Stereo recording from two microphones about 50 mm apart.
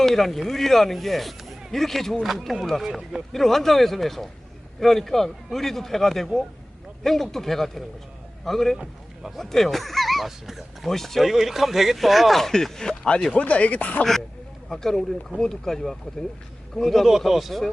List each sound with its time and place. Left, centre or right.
0.0 s speech: centre
13.3 s speech: left
14.7 s speech: centre